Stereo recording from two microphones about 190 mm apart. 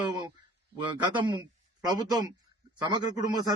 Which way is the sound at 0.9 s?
25° right (ahead or behind).